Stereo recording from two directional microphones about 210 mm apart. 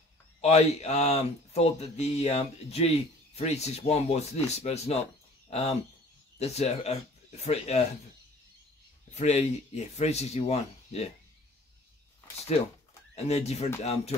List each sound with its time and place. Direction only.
0.4 s speech: 30° left (ahead or behind)
9.1 s speech: 30° left (ahead or behind)
13.1 s speech: 30° left (ahead or behind)